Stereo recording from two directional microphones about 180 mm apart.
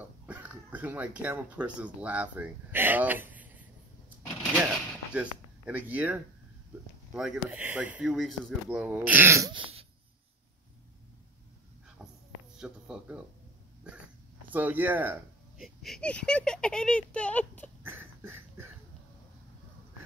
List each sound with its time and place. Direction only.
0.3 s speech: 10° right (ahead or behind)
5.1 s speech: 10° right (ahead or behind)
9.5 s throat clearing: 30° right (ahead or behind)
12.0 s a sound: 5° right (ahead or behind)
12.5 s speech: 5° right (ahead or behind)
14.5 s speech: 10° right (ahead or behind); by 17.6 s 10° left (ahead or behind)
17.8 s a sound: 15° right (ahead or behind)